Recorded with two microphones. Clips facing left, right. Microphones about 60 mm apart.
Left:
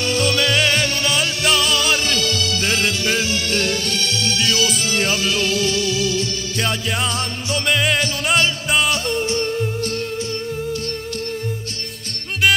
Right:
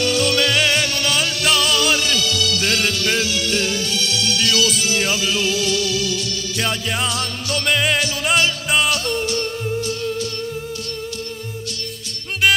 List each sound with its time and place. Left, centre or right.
0.2 s music: centre
4.4 s music: left
4.9 s music: centre
6.6 s music: centre